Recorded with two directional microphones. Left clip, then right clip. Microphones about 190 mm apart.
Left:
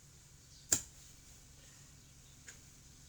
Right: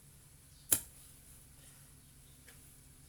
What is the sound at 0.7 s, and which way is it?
Tick, 30° right (ahead or behind).